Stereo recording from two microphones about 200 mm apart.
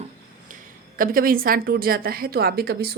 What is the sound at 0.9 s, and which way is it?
A woman's voice, 45° right (ahead or behind).